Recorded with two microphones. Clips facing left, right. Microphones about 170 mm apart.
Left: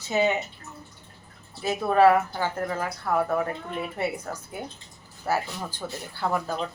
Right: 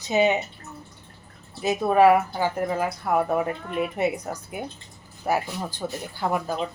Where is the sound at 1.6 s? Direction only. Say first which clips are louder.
Right 2 dB; 15° right (ahead or behind).